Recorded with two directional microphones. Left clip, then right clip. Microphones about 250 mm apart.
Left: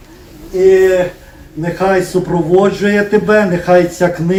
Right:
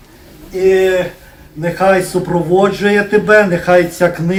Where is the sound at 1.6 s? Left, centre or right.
Right.